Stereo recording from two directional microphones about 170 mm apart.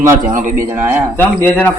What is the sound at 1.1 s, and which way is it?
Speech, 10° left (ahead or behind).